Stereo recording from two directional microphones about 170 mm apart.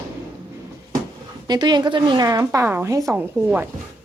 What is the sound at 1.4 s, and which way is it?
A woman's voice, 25° right (ahead or behind).